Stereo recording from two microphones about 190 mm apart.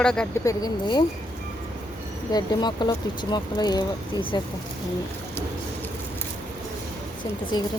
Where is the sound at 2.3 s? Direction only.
20° left (ahead or behind).